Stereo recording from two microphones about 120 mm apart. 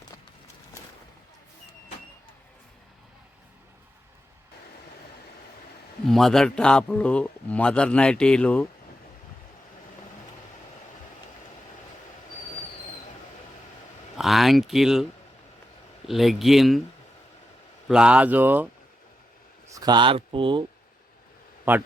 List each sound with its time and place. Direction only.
6.1 s a man's voice: centre (ahead or behind)
14.2 s speech: centre (ahead or behind)
16.0 s speech: centre (ahead or behind)
17.8 s speech: 5° right (ahead or behind)
19.7 s speech: 35° right (ahead or behind)
21.7 s speech: 15° right (ahead or behind)